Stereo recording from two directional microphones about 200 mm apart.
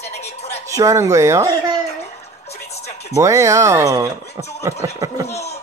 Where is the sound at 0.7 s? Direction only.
15° right (ahead or behind).